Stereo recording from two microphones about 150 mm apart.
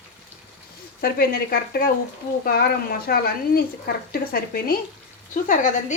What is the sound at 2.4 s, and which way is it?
Speech, 90° left.